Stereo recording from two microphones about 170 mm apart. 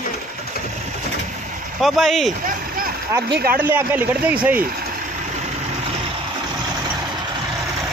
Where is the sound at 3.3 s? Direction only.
60° right (ahead or behind).